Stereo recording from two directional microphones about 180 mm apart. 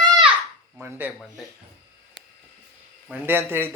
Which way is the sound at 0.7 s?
10° right (ahead or behind).